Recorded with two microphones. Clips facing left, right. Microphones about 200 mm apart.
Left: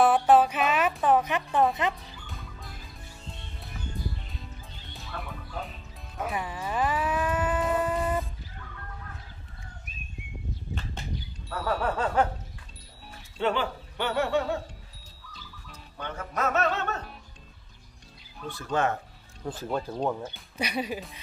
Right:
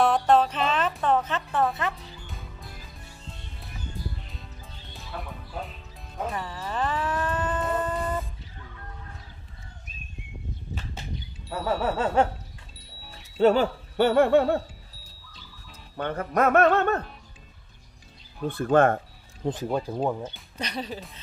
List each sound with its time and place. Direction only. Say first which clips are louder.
0.0 s music: left 1 dB; 5° left (ahead or behind)
2.2 s music: right 1 dB; centre (ahead or behind)
5.1 s music: right 2 dB; 10° right (ahead or behind)
6.2 s livestock: even; 10° left (ahead or behind)
11.6 s a sound: right 2 dB; 20° right (ahead or behind)
13.4 s speech: right 8 dB; 40° right (ahead or behind)
16.0 s music: right 7 dB; 55° right (ahead or behind)
18.5 s speech: right 7 dB; 55° right (ahead or behind)
19.4 s speech: right 4 dB; 15° right (ahead or behind)
20.2 s speech: left 2 dB; 10° left (ahead or behind)